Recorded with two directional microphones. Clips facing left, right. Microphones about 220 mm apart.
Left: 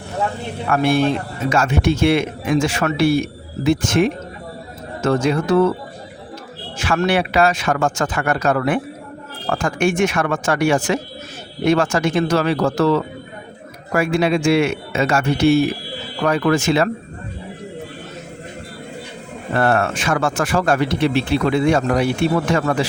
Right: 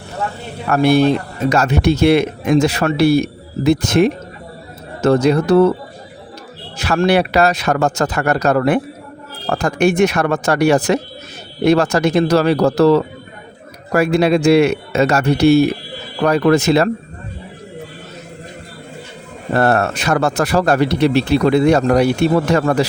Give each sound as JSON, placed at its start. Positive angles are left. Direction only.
{"t": 0.7, "sound": "speech", "side_deg": -40}
{"t": 6.7, "sound": "speech", "side_deg": -40}
{"t": 19.5, "sound": "speech", "side_deg": -40}